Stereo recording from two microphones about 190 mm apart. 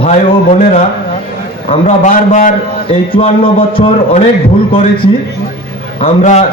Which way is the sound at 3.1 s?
30° left (ahead or behind).